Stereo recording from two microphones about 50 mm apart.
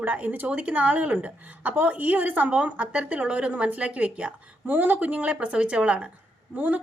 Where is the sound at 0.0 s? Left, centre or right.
Right.